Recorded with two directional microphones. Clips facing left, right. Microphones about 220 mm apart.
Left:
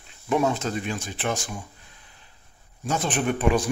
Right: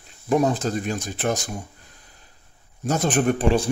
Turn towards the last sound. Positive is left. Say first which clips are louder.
# right 2 dB
turn(degrees=-30)  # may be behind; listen again after turning